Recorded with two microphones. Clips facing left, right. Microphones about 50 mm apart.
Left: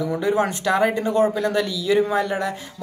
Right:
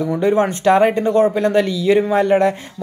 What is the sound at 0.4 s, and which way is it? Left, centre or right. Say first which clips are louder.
Speech: right 7 dB; right.